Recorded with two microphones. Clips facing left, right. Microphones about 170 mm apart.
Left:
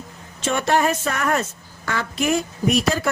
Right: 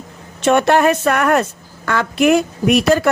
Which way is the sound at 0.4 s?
65° right (ahead or behind).